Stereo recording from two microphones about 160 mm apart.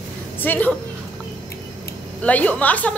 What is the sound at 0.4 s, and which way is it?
Speech, 10° left (ahead or behind).